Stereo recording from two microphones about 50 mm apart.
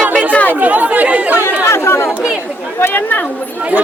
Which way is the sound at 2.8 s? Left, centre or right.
Left.